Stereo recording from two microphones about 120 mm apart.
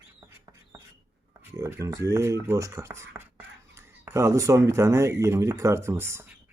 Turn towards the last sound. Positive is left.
turn(degrees=-25)  # may be behind; listen again after turning